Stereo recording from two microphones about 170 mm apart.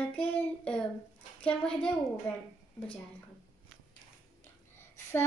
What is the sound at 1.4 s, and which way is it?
Speech, 5° left (ahead or behind).